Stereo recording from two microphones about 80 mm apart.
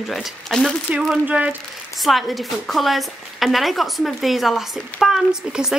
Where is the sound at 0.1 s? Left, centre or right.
Centre.